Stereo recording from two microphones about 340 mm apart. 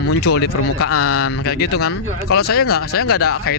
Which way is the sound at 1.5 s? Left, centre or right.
Left.